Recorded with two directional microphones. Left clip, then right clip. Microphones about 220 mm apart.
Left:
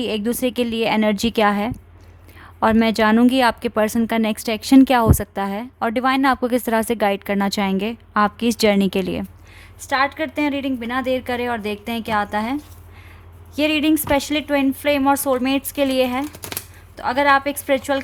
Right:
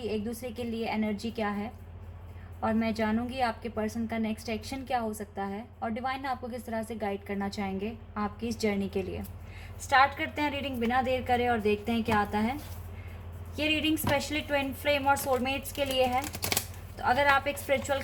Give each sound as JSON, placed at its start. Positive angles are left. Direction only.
{"t": 0.0, "sound": "a woman's voice", "side_deg": 45}
{"t": 13.6, "sound": "a woman's voice", "side_deg": 50}